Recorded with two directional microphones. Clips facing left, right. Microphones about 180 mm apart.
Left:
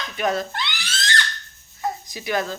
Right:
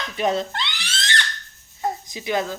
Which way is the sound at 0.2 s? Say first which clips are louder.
Right 1 dB; 25° right (ahead or behind).